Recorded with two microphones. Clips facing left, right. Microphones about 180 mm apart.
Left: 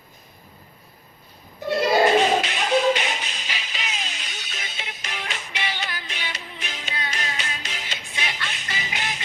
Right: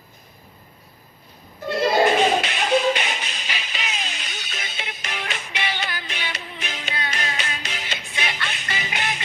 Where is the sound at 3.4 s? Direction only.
65° right (ahead or behind).